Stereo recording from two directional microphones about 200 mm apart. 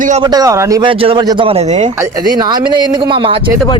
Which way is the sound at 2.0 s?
20° right (ahead or behind).